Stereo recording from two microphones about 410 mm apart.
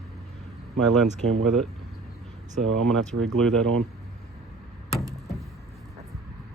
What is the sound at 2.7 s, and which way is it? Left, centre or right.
Speech, centre.